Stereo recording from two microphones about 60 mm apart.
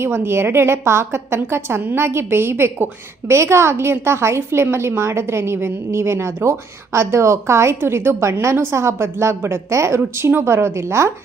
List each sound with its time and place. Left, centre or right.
0.0 s a woman's voice: right
3.3 s a woman's voice: right
10.0 s a woman's voice: right